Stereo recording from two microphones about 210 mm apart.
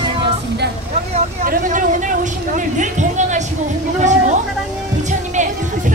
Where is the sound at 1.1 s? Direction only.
35° right (ahead or behind).